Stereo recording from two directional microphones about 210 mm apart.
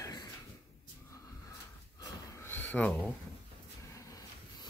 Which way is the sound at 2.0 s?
15° left (ahead or behind).